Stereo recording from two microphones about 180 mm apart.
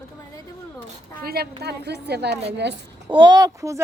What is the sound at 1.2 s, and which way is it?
A woman's voice, 55° right (ahead or behind).